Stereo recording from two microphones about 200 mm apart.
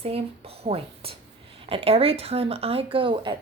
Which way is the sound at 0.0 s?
30° right (ahead or behind).